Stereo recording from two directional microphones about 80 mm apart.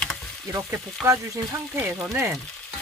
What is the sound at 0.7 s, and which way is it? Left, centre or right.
Speech, right.